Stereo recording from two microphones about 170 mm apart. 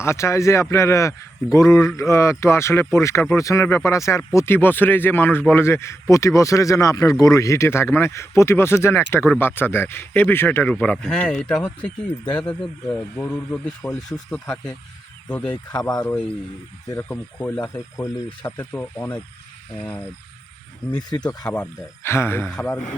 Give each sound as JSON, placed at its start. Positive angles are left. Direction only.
{"t": 0.0, "sound": "speech", "side_deg": 15}
{"t": 15.9, "sound": "speech", "side_deg": 20}
{"t": 21.5, "sound": "speech", "side_deg": 10}